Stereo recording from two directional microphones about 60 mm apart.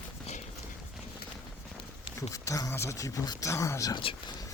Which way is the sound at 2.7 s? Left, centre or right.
Left.